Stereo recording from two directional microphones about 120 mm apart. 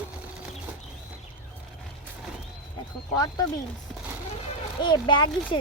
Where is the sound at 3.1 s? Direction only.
35° left (ahead or behind).